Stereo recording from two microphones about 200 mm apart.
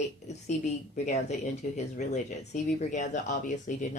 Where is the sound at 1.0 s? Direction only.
35° left (ahead or behind).